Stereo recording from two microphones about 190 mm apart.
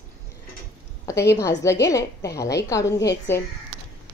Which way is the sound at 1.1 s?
15° left (ahead or behind).